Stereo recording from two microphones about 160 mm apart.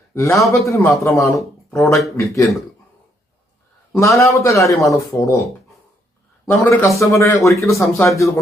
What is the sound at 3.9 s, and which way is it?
Speech, 20° left (ahead or behind).